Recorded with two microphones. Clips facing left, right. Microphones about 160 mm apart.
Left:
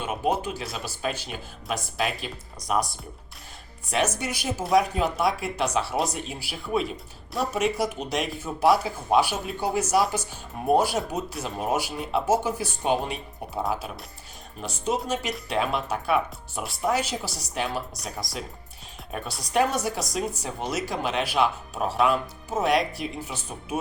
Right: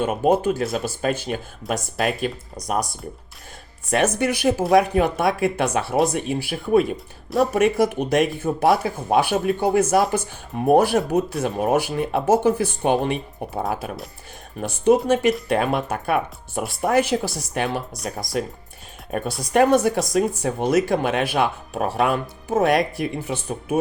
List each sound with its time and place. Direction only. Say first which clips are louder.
0.0 s speech: right 8 dB; 50° right (ahead or behind)
3.8 s speech: right 6 dB; 55° right (ahead or behind)
14.6 s speech: right 11 dB; 55° right (ahead or behind)